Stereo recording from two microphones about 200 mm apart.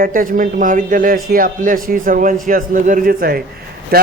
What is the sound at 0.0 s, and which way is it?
A man's voice, 45° right (ahead or behind).